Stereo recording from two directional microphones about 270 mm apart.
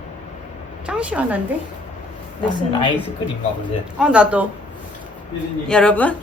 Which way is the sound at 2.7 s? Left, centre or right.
Centre.